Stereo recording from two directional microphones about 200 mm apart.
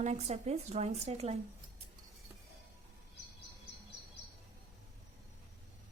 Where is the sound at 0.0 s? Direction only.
35° right (ahead or behind).